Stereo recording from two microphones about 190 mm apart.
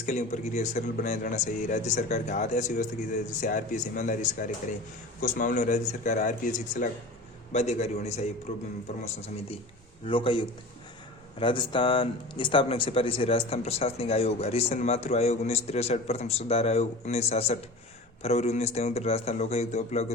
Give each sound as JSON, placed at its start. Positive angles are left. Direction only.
{"t": 0.0, "sound": "speech", "side_deg": 40}
{"t": 10.1, "sound": "a man's voice", "side_deg": 25}